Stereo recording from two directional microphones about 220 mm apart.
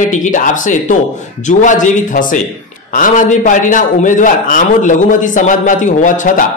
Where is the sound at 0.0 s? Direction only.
35° left (ahead or behind).